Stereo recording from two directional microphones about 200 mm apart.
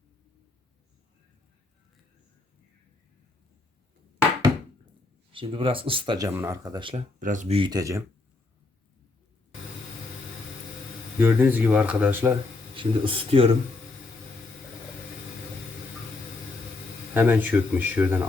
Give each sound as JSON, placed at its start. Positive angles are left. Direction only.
{"t": 5.3, "sound": "speech", "side_deg": -25}
{"t": 6.9, "sound": "speech", "side_deg": -40}
{"t": 11.2, "sound": "speech", "side_deg": -10}
{"t": 12.7, "sound": "speech", "side_deg": -25}
{"t": 17.2, "sound": "speech", "side_deg": -10}